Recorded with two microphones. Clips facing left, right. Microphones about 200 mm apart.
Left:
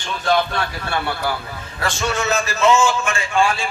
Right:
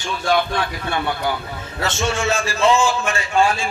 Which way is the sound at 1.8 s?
25° right (ahead or behind).